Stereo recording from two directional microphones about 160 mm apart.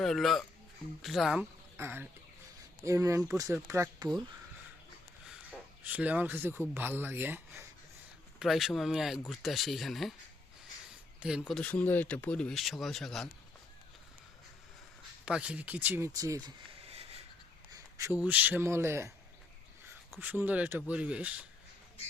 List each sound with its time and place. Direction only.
0.0 s speech: centre (ahead or behind)
1.7 s speech: 15° right (ahead or behind)
5.3 s speech: 10° right (ahead or behind)
8.4 s speech: centre (ahead or behind)
11.2 s speech: 5° right (ahead or behind)
15.2 s speech: 5° right (ahead or behind); by 16.5 s 20° right (ahead or behind)
16.9 s a sound: 40° right (ahead or behind)
17.7 s speech: 20° right (ahead or behind)
20.1 s speech: 10° right (ahead or behind)